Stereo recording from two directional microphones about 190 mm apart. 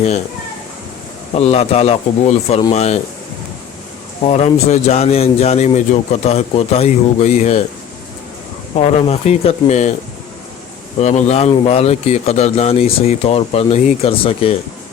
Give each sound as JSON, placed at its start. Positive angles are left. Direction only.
{"t": 1.4, "sound": "speech", "side_deg": 35}
{"t": 4.3, "sound": "speech", "side_deg": 35}
{"t": 8.7, "sound": "speech", "side_deg": 35}
{"t": 11.0, "sound": "speech", "side_deg": 35}